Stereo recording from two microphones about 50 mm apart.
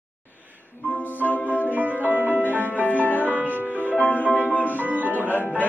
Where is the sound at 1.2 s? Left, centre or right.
Left.